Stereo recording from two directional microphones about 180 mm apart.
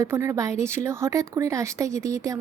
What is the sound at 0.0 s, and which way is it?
Speech, 15° right (ahead or behind).